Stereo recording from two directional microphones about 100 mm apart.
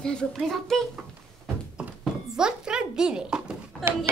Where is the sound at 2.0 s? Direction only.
10° right (ahead or behind).